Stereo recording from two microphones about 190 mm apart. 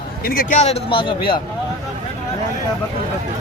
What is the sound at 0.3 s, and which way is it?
Speech, 45° left (ahead or behind).